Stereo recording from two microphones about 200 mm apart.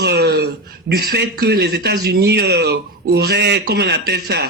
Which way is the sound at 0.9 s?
55° right (ahead or behind).